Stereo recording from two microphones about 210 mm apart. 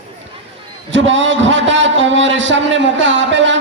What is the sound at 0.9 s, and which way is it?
A man's voice, 60° right (ahead or behind).